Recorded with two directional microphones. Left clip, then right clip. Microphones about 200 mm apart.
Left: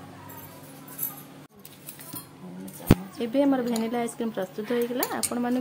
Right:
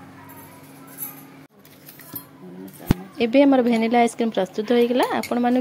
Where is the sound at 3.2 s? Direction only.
20° right (ahead or behind).